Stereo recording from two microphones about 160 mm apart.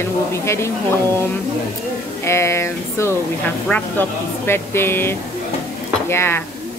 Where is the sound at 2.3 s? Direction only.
15° left (ahead or behind).